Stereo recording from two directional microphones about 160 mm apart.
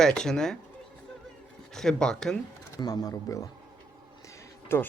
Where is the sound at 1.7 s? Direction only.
5° left (ahead or behind).